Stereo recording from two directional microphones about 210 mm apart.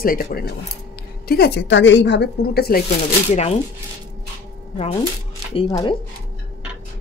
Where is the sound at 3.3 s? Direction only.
30° left (ahead or behind).